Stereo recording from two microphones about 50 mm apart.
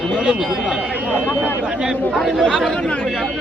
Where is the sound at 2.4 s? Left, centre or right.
Centre.